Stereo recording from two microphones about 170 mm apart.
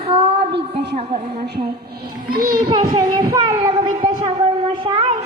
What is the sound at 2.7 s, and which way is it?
Child singing, 25° right (ahead or behind).